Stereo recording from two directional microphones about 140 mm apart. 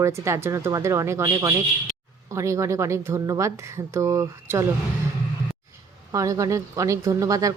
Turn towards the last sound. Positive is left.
turn(degrees=-25)  # may be behind; listen again after turning